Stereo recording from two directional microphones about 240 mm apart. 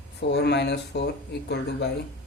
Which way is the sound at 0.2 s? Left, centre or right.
Left.